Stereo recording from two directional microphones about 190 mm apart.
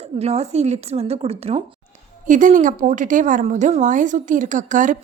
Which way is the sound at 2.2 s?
40° right (ahead or behind).